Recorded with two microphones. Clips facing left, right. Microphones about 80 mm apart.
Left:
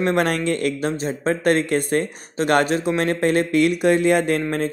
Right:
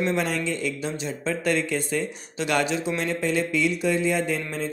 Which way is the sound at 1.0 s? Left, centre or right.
Left.